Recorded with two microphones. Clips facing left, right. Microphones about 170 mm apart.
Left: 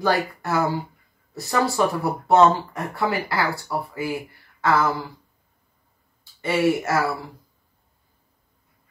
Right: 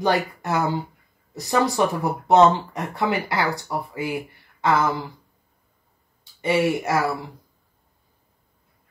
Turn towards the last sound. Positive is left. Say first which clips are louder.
# left 1 dB
turn(degrees=-20)  # may be behind; listen again after turning